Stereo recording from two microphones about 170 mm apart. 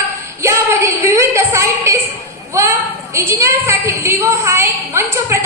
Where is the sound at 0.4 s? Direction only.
15° right (ahead or behind).